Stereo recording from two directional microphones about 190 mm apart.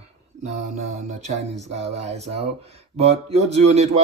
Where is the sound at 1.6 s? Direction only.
35° right (ahead or behind).